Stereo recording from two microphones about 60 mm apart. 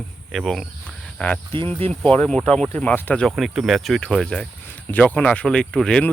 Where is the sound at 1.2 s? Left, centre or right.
Centre.